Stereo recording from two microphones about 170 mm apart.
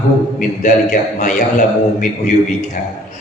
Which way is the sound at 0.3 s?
50° left (ahead or behind).